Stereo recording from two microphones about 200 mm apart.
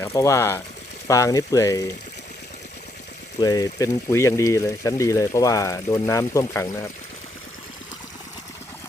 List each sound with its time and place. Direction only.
0.0 s speech: 15° left (ahead or behind)
3.4 s speech: 20° left (ahead or behind)